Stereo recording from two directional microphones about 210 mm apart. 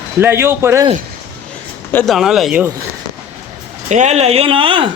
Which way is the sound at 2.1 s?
Centre (ahead or behind).